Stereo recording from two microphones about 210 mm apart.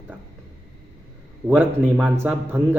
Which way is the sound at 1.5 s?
5° right (ahead or behind).